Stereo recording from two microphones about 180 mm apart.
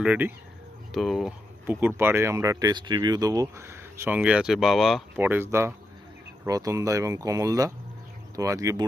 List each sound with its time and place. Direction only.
0.0 s speech: 10° right (ahead or behind)
5.2 s speech: 10° right (ahead or behind)